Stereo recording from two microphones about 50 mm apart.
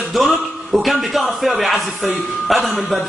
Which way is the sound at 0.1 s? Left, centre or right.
Centre.